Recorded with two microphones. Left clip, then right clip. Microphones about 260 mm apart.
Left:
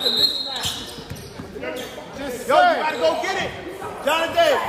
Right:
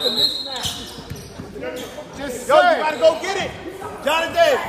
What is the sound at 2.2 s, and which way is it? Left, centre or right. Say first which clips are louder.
Chatter: right 2 dB; right.